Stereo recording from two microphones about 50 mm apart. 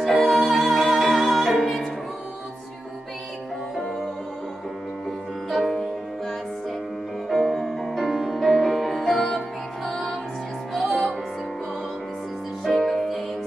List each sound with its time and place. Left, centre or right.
0.0 s music: centre
5.5 s music: centre
12.6 s music: centre